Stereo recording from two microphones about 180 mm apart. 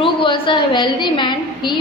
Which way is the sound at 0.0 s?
30° left (ahead or behind).